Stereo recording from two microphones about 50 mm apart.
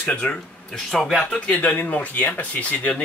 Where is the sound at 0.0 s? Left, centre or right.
Left.